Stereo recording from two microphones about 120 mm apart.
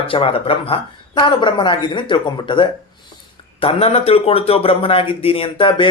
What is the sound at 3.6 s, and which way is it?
Speech, 55° left (ahead or behind).